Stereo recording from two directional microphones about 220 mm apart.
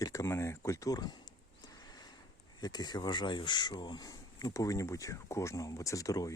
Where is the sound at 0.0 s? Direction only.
15° left (ahead or behind).